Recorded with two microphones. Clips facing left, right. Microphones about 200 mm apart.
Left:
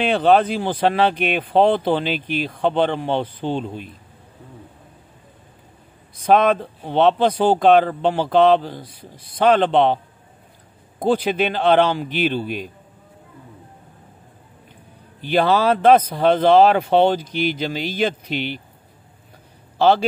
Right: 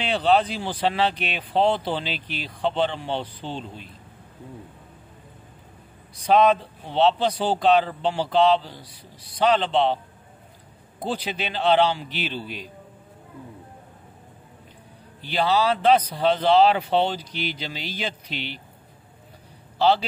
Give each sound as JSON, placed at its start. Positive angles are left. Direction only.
{"t": 0.0, "sound": "speech", "side_deg": 55}
{"t": 6.2, "sound": "speech", "side_deg": 55}
{"t": 11.0, "sound": "speech", "side_deg": 50}
{"t": 15.2, "sound": "speech", "side_deg": 55}
{"t": 19.8, "sound": "speech", "side_deg": 50}